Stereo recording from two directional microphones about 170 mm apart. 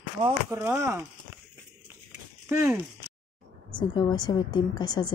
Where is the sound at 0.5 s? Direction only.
15° right (ahead or behind).